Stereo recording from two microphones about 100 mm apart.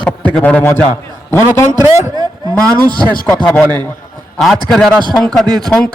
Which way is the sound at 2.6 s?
35° right (ahead or behind).